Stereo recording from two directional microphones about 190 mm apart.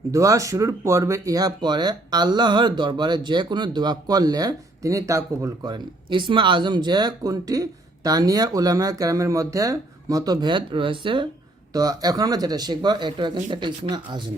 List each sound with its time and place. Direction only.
0.1 s speech: 15° right (ahead or behind)